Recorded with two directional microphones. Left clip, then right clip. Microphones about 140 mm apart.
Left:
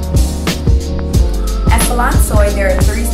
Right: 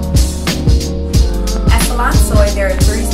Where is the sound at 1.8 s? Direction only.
Centre (ahead or behind).